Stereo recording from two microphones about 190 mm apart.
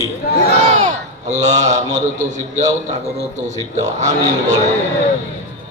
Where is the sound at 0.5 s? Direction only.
35° right (ahead or behind).